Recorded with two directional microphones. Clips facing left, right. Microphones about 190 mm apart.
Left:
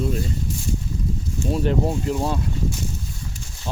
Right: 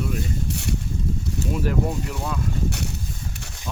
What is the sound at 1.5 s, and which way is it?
Speech, 25° left (ahead or behind).